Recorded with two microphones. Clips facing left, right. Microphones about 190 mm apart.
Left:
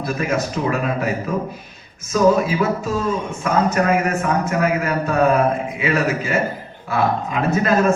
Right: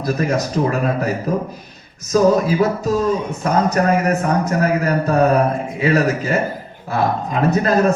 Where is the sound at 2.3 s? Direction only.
40° right (ahead or behind).